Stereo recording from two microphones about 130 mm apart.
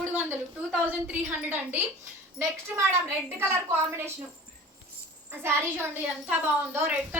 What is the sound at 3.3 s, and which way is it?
Speech, 20° right (ahead or behind).